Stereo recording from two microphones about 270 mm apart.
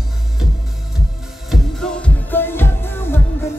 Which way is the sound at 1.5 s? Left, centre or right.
Centre.